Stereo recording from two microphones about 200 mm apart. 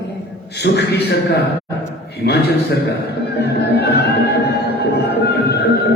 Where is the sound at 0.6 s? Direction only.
55° left (ahead or behind).